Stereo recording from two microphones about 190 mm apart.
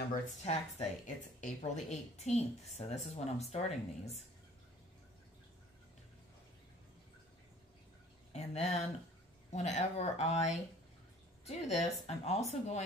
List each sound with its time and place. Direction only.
0.1 s speech: 35° left (ahead or behind)
8.3 s speech: 35° left (ahead or behind)